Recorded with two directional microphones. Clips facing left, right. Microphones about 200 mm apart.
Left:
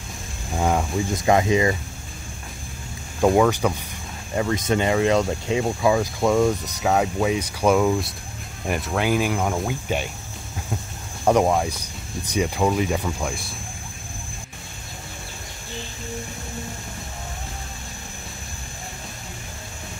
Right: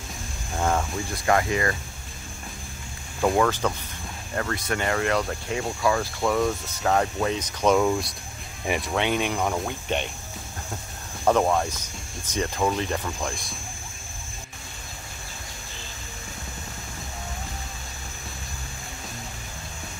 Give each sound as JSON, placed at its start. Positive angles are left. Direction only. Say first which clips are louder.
{"t": 0.6, "sound": "speech", "louder": "left 3 dB", "side_deg": 15}
{"t": 3.2, "sound": "speech", "louder": "left 4 dB", "side_deg": 15}
{"t": 11.2, "sound": "speech", "louder": "left 3 dB", "side_deg": 15}